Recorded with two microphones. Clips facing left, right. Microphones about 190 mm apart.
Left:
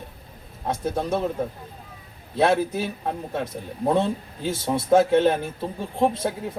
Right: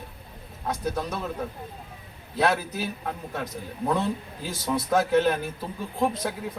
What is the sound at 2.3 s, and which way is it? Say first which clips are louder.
A man's voice: left 4 dB; 25° left (ahead or behind).